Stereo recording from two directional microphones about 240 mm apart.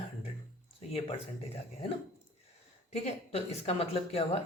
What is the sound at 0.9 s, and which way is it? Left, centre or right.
Speech, left.